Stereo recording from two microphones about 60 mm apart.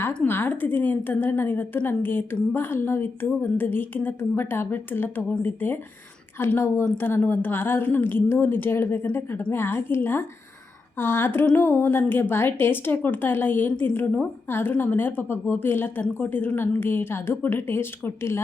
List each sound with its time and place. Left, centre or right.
0.3 s a woman's voice: left
13.7 s a woman's voice: left
14.5 s a woman's voice: left